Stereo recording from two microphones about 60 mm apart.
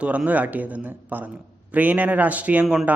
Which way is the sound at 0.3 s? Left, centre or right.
Right.